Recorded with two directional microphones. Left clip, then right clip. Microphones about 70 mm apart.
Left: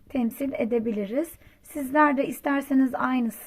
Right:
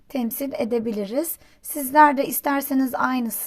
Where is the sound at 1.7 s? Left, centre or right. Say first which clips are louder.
Right 6 dB; right.